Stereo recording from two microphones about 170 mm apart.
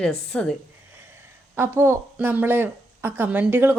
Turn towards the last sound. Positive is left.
turn(degrees=-10)  # may be behind; listen again after turning